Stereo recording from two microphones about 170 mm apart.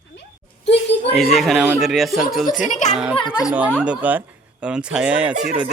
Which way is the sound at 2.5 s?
50° left (ahead or behind).